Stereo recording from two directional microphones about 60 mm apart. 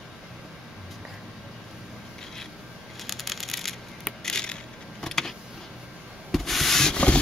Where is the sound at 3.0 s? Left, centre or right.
Centre.